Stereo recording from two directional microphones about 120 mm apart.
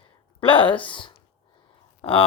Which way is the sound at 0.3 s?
45° left (ahead or behind).